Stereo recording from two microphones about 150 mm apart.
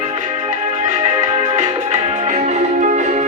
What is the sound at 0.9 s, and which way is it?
Music, 50° right (ahead or behind).